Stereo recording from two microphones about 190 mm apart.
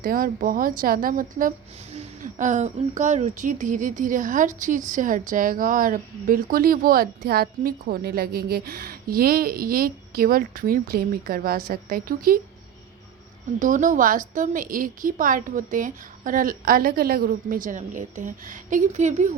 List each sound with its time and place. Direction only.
0.0 s a woman's voice: 50° right (ahead or behind)
13.6 s a woman's voice: 45° right (ahead or behind)